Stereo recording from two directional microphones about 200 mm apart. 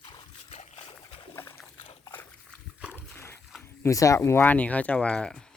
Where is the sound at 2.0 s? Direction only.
10° left (ahead or behind).